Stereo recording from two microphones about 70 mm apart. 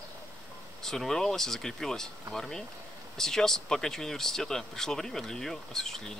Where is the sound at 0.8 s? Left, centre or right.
Centre.